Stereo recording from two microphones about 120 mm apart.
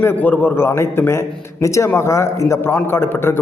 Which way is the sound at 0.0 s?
15° left (ahead or behind).